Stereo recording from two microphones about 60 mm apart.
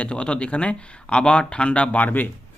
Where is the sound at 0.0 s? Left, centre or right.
Centre.